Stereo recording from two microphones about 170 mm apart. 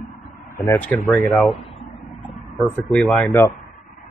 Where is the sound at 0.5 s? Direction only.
15° left (ahead or behind).